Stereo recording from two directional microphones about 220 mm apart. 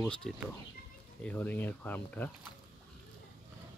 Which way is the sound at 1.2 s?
5° left (ahead or behind).